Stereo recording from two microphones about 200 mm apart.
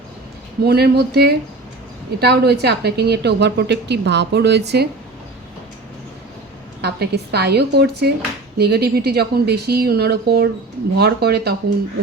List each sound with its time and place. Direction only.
0.6 s a woman's voice: 55° right (ahead or behind)
6.8 s a woman's voice: 55° right (ahead or behind)